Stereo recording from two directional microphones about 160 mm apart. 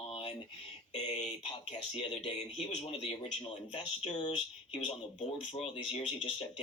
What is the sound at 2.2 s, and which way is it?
Speech, 35° left (ahead or behind).